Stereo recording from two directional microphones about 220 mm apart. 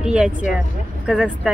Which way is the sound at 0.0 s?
5° right (ahead or behind).